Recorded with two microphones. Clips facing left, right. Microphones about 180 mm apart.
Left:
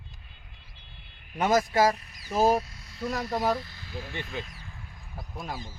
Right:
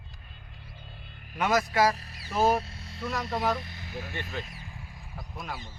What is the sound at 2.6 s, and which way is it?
Vehicle, 30° right (ahead or behind).